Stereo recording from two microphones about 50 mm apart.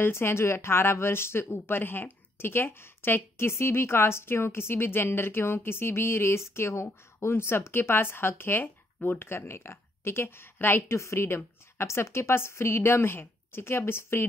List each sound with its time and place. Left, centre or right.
0.0 s a woman's voice: left
11.1 s a woman's voice: left